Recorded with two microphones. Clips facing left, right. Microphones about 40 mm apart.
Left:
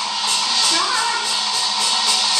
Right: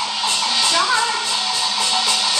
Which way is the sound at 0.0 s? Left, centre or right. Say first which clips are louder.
Right 1 dB; centre.